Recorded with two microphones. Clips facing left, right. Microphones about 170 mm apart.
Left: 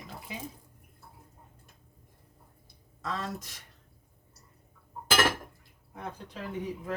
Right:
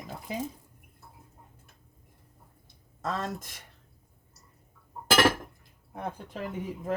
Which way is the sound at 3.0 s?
45° right (ahead or behind).